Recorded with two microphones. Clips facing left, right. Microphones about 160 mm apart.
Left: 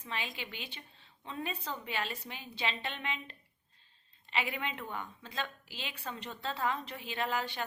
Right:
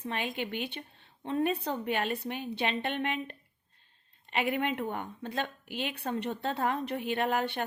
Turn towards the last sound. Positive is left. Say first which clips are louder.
# right 5 dB
turn(degrees=-55)  # may be behind; listen again after turning